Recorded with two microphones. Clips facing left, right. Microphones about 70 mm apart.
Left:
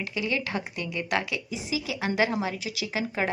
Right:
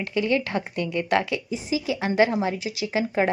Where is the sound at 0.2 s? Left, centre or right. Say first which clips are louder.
Right 6 dB; right.